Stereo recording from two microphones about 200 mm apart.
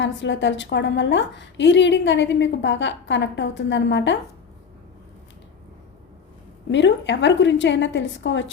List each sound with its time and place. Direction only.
0.0 s a woman's voice: 65° left (ahead or behind)
6.7 s a woman's voice: 65° left (ahead or behind)